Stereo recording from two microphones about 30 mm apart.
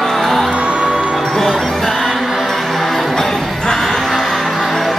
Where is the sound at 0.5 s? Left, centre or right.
Right.